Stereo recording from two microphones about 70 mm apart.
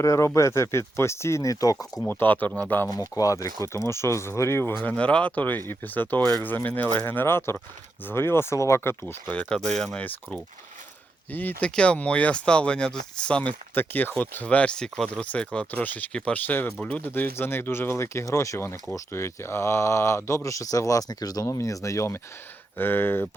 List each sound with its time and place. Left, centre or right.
0.0 s speech: left
2.0 s speech: left
3.2 s speech: left
4.8 s speech: centre; by 9.3 s left
9.3 s speech: centre
10.0 s speech: left
13.7 s speech: left
14.4 s speech: centre; by 22.2 s left
22.8 s speech: left